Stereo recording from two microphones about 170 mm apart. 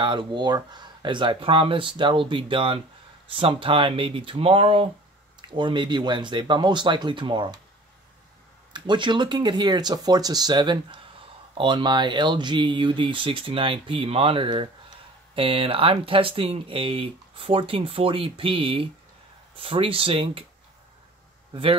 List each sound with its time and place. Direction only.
0.0 s speech: 30° right (ahead or behind)
8.7 s speech: 25° right (ahead or behind)